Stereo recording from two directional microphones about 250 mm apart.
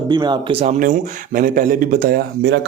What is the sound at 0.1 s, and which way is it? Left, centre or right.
Speech, centre.